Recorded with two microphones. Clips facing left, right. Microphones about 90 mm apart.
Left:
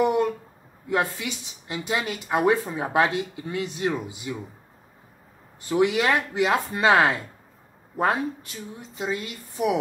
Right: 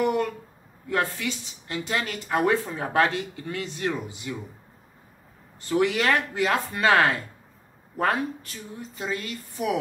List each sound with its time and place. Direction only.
0.0 s a sound: 20° left (ahead or behind)
0.8 s speech: 15° left (ahead or behind)
5.7 s speech: 15° left (ahead or behind)